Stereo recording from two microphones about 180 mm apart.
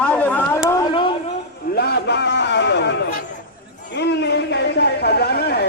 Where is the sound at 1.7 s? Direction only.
65° left (ahead or behind).